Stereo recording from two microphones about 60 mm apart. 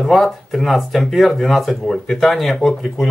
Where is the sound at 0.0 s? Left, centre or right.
Centre.